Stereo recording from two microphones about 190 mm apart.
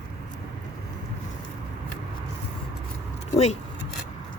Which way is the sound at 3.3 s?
35° left (ahead or behind).